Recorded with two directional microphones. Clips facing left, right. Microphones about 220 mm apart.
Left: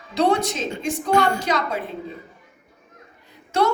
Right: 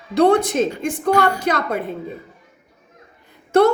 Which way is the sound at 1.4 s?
55° right (ahead or behind).